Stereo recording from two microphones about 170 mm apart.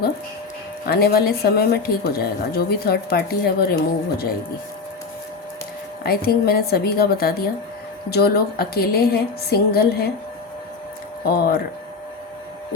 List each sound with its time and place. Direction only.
0.9 s a woman's voice: 65° left (ahead or behind)
6.0 s a woman's voice: 65° left (ahead or behind)
11.3 s a woman's voice: 60° left (ahead or behind)